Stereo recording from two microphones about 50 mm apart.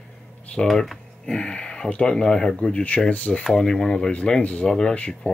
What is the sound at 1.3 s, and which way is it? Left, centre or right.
Speech, centre.